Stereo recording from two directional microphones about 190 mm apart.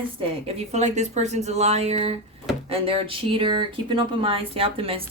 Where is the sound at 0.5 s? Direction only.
35° right (ahead or behind).